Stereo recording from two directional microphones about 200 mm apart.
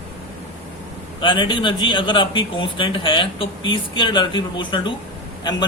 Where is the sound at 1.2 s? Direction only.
25° left (ahead or behind).